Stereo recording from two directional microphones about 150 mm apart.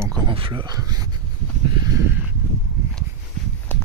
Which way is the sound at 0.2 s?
35° right (ahead or behind).